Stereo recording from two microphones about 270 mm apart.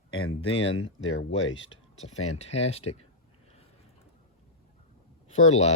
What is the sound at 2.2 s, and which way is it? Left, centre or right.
Speech, left.